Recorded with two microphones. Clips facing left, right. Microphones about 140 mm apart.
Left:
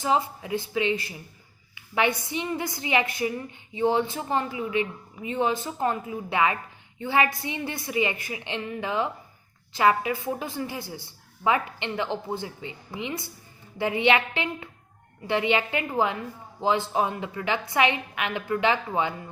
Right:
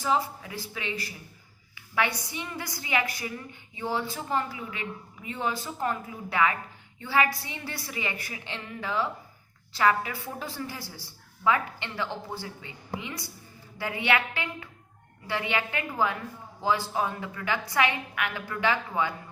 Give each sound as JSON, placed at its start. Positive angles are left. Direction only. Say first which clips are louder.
{"t": 0.0, "sound": "a woman's voice", "louder": "left 2 dB", "side_deg": 20}